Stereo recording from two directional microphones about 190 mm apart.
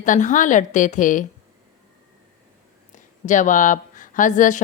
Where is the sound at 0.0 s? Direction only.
40° left (ahead or behind).